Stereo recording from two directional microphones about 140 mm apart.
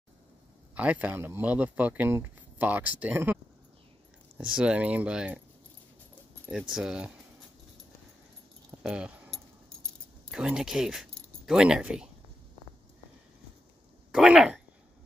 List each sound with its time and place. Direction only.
0.7 s speech: 10° right (ahead or behind)
4.4 s speech: 5° right (ahead or behind)
6.7 s speech: 5° right (ahead or behind)
8.8 s keys jangling: 5° right (ahead or behind)
10.3 s speech: 5° right (ahead or behind)
14.1 s speech: 5° right (ahead or behind)